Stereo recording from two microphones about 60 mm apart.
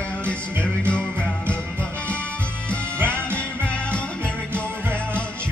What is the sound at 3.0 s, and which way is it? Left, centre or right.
Music, right.